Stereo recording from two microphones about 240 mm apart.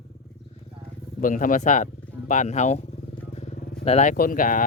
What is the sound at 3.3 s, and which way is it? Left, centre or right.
Vehicle, left.